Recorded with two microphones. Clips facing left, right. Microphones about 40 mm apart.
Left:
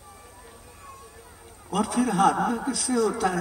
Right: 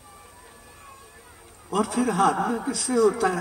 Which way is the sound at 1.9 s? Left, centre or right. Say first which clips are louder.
Left 2 dB; right.